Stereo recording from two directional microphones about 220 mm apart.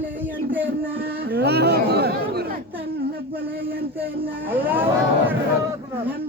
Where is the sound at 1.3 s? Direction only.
50° right (ahead or behind).